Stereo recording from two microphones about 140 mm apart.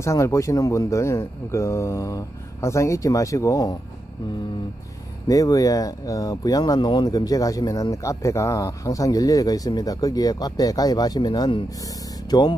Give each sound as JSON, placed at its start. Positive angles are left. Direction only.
{"t": 0.0, "sound": "speech", "side_deg": 20}
{"t": 5.3, "sound": "speech", "side_deg": 25}